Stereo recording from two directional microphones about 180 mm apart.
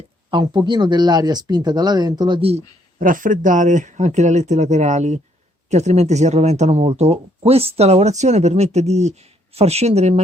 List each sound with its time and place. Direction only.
0.3 s speech: 25° right (ahead or behind)
3.0 s speech: 50° right (ahead or behind)